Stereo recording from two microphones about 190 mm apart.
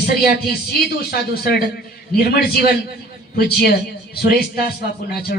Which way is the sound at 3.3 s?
55° left (ahead or behind).